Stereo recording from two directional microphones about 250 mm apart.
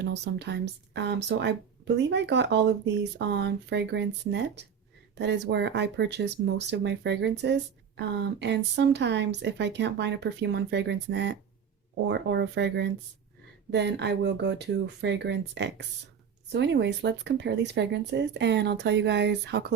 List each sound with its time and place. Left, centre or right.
0.0 s speech: right